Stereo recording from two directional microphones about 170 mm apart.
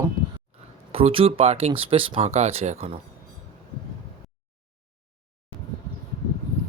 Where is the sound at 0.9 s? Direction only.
35° right (ahead or behind).